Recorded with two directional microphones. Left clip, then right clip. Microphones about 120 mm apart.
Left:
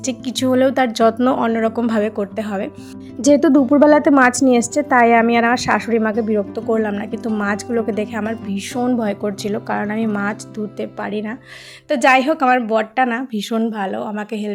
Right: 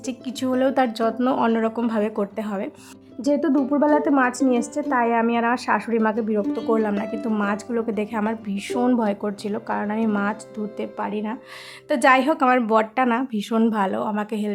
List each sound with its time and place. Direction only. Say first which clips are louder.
0.0 s a woman's voice: left 7 dB; 20° left (ahead or behind)
1.4 s speech: left 3 dB; 5° left (ahead or behind)
3.2 s a woman's voice: left 8 dB; 30° left (ahead or behind)
6.0 s speech: left 4 dB; 5° left (ahead or behind)
9.2 s speech: left 5 dB; 10° left (ahead or behind)
12.5 s a woman's voice: left 2 dB; 10° right (ahead or behind)
13.0 s speech: left 3 dB; centre (ahead or behind)
13.6 s speech: right 2 dB; 20° right (ahead or behind)
13.9 s a woman's voice: left 1 dB; 5° right (ahead or behind)